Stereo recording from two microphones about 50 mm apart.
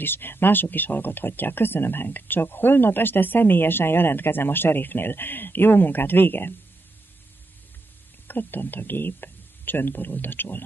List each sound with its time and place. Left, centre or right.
0.0 s speech: left
8.3 s speech: left